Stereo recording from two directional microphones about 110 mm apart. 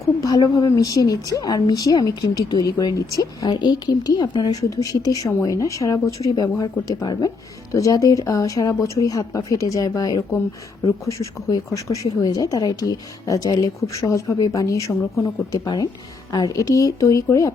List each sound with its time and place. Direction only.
0.0 s a woman's voice: 35° left (ahead or behind)
15.2 s a woman's voice: 40° left (ahead or behind)